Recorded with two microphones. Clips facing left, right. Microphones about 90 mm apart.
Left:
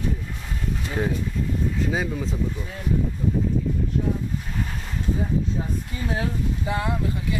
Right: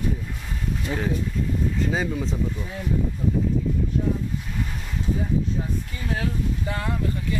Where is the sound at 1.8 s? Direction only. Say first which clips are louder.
Right 1 dB; centre (ahead or behind).